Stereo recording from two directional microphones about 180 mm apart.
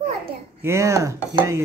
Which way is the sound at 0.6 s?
15° right (ahead or behind).